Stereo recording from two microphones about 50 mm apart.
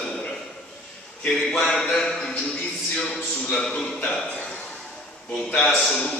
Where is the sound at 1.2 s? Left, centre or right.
Centre.